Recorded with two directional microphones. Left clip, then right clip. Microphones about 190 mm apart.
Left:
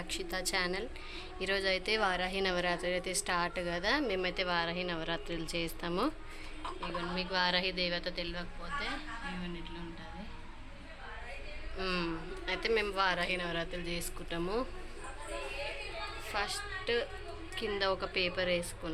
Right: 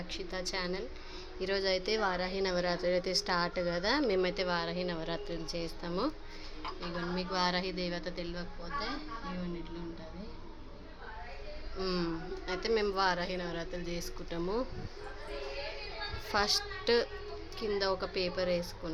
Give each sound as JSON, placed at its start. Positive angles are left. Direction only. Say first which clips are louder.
{"t": 0.1, "sound": "a woman's voice", "louder": "left 3 dB", "side_deg": 0}
{"t": 6.9, "sound": "speech", "louder": "left 1 dB", "side_deg": -10}
{"t": 11.8, "sound": "speech", "louder": "even", "side_deg": -20}
{"t": 16.3, "sound": "a woman's voice", "louder": "right 6 dB", "side_deg": -30}
{"t": 17.5, "sound": "a woman's voice", "louder": "even", "side_deg": -10}